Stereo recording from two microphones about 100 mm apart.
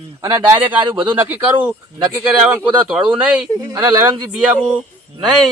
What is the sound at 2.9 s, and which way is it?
Speech, 10° right (ahead or behind).